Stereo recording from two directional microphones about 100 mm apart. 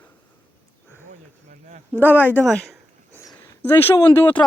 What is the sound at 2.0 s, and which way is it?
Speech, 20° left (ahead or behind).